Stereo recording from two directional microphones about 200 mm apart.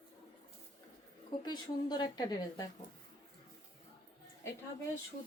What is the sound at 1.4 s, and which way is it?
A woman's voice, 20° left (ahead or behind).